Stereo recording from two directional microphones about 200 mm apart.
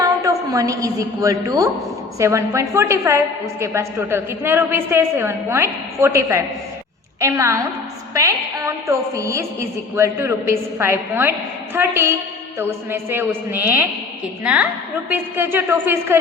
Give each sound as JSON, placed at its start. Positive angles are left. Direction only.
{"t": 0.0, "sound": "a woman's voice", "side_deg": -15}